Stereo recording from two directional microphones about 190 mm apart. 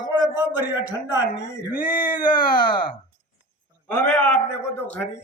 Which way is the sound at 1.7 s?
45° left (ahead or behind).